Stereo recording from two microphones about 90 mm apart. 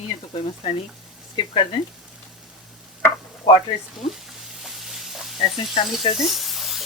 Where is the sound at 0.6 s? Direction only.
70° left (ahead or behind).